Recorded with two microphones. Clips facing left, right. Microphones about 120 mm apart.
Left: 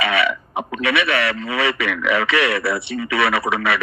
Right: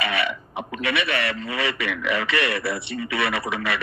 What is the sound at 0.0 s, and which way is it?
Speech, 70° left (ahead or behind).